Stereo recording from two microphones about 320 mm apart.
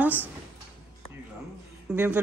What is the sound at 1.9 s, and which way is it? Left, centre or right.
Speech, centre.